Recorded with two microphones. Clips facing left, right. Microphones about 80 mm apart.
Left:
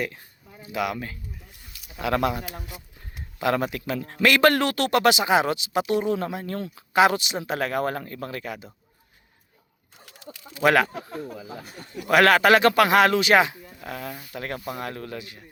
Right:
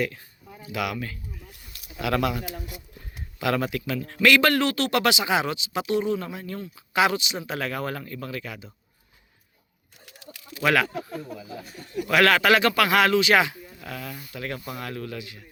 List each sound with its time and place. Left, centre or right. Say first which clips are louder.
0.7 s a man's voice: left 2 dB; left
10.3 s a sound: left 4 dB; left
10.6 s a man's voice: left 3 dB; left